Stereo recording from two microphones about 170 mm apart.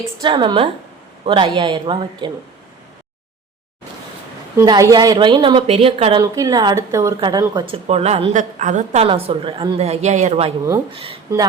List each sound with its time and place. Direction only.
0.2 s a woman's voice: 25° right (ahead or behind)
4.5 s a woman's voice: 20° right (ahead or behind)
6.3 s a woman's voice: 20° right (ahead or behind)